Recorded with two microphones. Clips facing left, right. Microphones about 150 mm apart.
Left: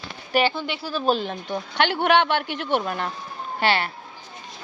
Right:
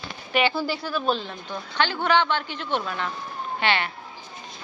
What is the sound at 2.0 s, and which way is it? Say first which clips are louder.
Speech: left 3 dB; 60° left (ahead or behind).